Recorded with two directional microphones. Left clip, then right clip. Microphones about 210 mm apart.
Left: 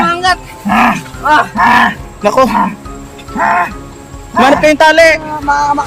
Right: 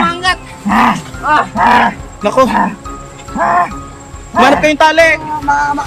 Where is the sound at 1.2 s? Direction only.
35° left (ahead or behind).